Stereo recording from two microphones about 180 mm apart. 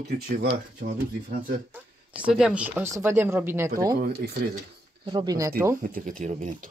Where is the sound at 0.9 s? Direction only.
50° right (ahead or behind).